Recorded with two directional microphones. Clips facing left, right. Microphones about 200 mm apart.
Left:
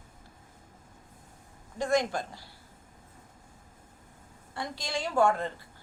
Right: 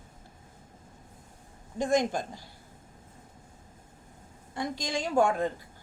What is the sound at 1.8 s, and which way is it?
Speech, 20° right (ahead or behind).